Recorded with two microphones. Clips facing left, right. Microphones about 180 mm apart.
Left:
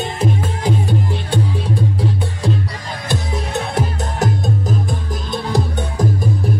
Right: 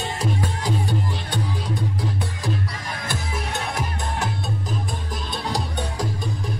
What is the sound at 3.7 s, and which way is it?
Music, 40° left (ahead or behind).